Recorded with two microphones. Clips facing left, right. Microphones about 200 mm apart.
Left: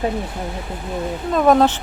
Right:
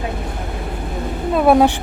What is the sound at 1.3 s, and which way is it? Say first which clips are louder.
Speech: right 2 dB; 10° right (ahead or behind).